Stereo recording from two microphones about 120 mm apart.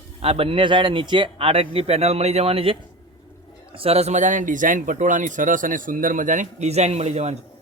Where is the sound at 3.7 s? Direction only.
55° right (ahead or behind).